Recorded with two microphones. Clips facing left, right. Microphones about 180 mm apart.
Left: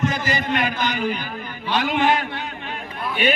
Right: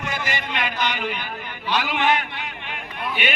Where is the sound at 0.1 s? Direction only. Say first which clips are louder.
Left 5 dB; 40° left (ahead or behind).